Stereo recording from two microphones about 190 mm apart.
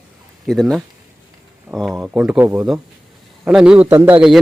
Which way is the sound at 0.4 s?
Centre (ahead or behind).